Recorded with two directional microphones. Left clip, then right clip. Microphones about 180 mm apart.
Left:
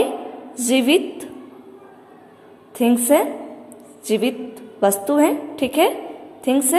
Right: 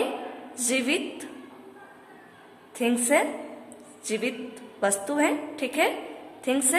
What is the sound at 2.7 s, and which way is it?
A woman's voice, 20° left (ahead or behind).